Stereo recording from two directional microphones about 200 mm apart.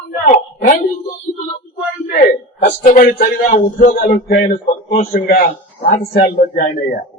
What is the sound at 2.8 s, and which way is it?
A man's voice, 40° left (ahead or behind).